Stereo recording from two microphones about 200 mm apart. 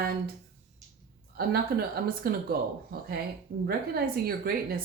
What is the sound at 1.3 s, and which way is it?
Speech, 50° right (ahead or behind).